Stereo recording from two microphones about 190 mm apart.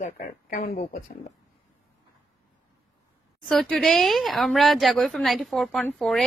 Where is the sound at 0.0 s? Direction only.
40° left (ahead or behind).